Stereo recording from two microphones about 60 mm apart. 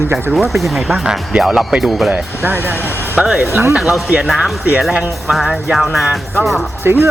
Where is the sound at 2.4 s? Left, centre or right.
Right.